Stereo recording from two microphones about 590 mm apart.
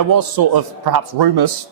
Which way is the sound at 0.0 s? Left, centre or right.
Right.